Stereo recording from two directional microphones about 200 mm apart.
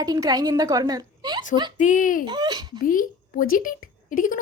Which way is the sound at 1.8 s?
40° left (ahead or behind).